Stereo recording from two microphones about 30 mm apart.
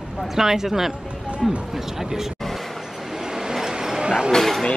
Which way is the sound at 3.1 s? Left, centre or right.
Centre.